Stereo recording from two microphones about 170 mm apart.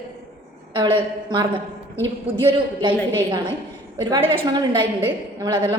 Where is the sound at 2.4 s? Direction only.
30° right (ahead or behind).